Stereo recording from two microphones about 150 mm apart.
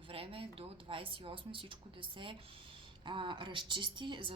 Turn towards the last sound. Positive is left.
turn(degrees=-30)  # may be behind; listen again after turning